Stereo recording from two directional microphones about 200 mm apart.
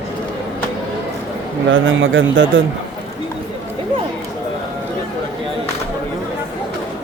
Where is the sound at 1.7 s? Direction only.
75° right (ahead or behind).